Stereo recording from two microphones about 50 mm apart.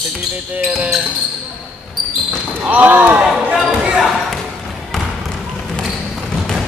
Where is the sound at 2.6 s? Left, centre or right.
Right.